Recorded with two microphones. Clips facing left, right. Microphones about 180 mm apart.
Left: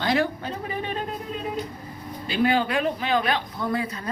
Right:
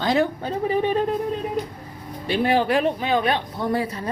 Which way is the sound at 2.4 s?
30° right (ahead or behind).